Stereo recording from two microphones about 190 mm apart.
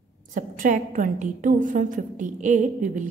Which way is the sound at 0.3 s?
45° right (ahead or behind).